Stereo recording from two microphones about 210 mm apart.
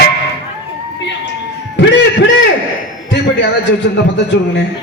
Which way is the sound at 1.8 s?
60° left (ahead or behind).